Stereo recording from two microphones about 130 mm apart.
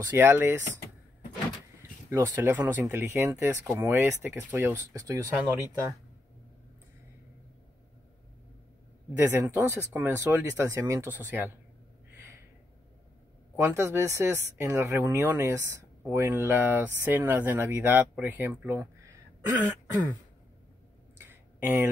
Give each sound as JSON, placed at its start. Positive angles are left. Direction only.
{"t": 0.0, "sound": "speech", "side_deg": -20}
{"t": 2.0, "sound": "speech", "side_deg": -20}
{"t": 9.2, "sound": "speech", "side_deg": -15}
{"t": 13.6, "sound": "speech", "side_deg": -20}
{"t": 21.2, "sound": "a sound", "side_deg": -15}